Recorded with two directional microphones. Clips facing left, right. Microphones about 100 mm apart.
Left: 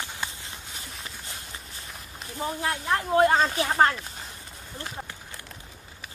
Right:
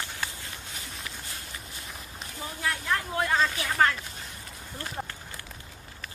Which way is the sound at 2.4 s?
30° left (ahead or behind).